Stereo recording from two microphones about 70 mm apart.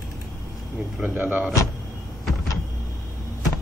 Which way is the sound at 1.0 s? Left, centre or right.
Right.